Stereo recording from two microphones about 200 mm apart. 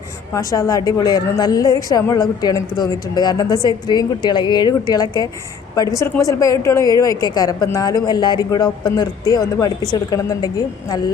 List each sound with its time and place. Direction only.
0.3 s a woman's voice: 15° left (ahead or behind)